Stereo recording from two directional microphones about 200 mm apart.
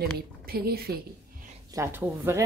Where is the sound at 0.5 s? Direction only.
50° right (ahead or behind).